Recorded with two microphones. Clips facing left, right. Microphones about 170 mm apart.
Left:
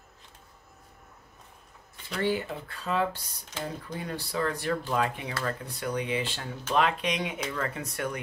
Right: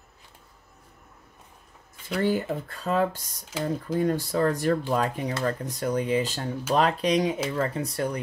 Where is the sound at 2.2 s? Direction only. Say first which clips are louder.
Right 3 dB; 45° right (ahead or behind).